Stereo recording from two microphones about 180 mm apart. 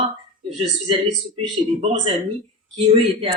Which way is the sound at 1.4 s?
35° right (ahead or behind).